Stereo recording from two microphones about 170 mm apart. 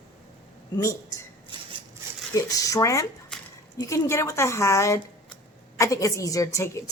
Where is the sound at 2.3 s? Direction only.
20° left (ahead or behind).